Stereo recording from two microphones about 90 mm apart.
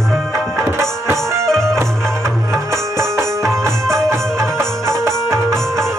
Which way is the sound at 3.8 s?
5° left (ahead or behind).